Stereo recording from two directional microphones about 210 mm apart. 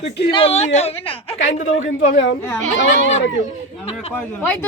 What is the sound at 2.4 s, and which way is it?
Speech, 10° left (ahead or behind).